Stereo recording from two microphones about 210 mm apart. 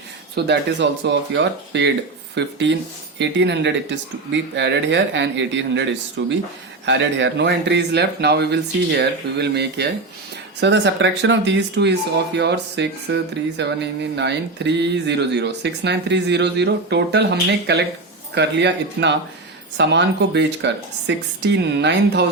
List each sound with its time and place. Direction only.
0.3 s speech: 55° right (ahead or behind)